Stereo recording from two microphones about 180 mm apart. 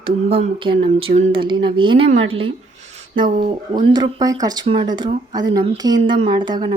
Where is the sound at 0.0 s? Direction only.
30° right (ahead or behind).